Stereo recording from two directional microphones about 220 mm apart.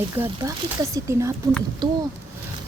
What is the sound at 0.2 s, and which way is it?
Speech, 15° right (ahead or behind).